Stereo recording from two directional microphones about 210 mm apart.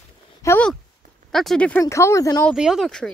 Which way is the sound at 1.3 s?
Centre (ahead or behind).